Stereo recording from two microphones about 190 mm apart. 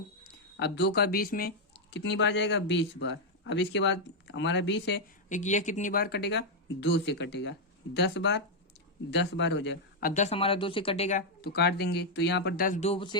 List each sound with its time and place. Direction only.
0.5 s speech: 65° left (ahead or behind)
5.3 s speech: 40° left (ahead or behind); by 9.7 s 70° left (ahead or behind)
10.0 s speech: 45° left (ahead or behind)
10.2 s speech: 30° left (ahead or behind)
11.3 s speech: 55° left (ahead or behind); by 13.1 s 30° left (ahead or behind)